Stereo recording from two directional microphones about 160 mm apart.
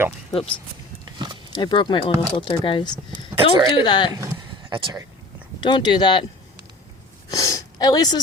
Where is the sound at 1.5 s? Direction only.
30° left (ahead or behind).